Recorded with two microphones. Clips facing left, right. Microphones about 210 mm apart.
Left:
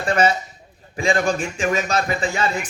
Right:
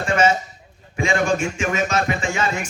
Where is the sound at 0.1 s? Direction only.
35° left (ahead or behind).